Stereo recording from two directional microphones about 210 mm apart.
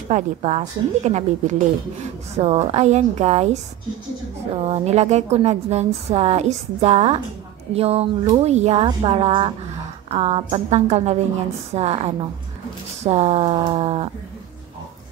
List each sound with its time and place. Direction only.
0.1 s speech: 30° right (ahead or behind)
4.6 s speech: 30° right (ahead or behind)